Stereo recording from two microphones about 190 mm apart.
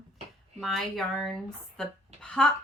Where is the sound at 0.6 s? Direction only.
Centre (ahead or behind).